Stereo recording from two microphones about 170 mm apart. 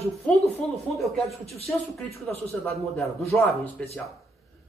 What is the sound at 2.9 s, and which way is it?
Speech, 5° left (ahead or behind).